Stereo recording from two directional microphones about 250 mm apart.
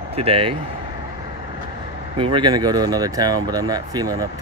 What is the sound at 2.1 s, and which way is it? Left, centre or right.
Speech, right.